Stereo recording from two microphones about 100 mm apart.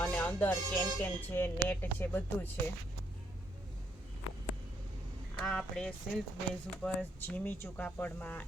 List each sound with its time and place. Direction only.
0.0 s speech: 15° left (ahead or behind)
5.4 s speech: 5° left (ahead or behind)
7.2 s speech: 20° left (ahead or behind)